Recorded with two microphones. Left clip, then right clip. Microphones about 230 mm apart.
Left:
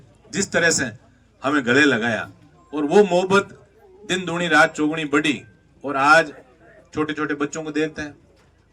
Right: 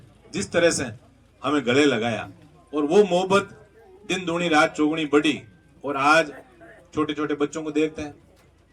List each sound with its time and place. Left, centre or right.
0.3 s a man's voice: left